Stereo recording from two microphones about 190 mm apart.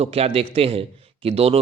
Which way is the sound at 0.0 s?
30° right (ahead or behind).